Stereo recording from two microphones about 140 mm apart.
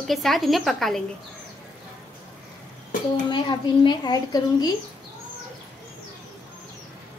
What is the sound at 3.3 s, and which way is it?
A woman's voice, 35° left (ahead or behind).